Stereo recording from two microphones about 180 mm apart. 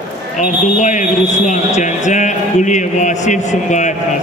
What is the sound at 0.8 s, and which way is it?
Speech, 40° left (ahead or behind).